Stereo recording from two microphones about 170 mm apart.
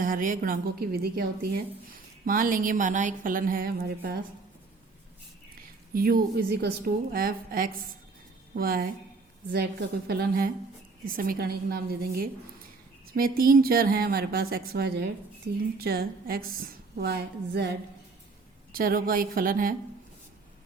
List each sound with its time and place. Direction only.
0.0 s a woman's voice: 55° right (ahead or behind)
5.9 s a woman's voice: 60° right (ahead or behind)
10.1 s a woman's voice: 65° right (ahead or behind)
15.8 s a woman's voice: 65° right (ahead or behind)
18.7 s a woman's voice: 60° right (ahead or behind)